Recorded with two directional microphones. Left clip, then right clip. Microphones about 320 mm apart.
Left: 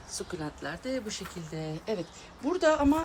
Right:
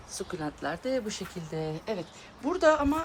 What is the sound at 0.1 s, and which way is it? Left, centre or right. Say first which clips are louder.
Speech: right 2 dB; centre.